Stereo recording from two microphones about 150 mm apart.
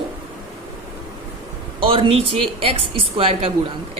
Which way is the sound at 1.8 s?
40° right (ahead or behind).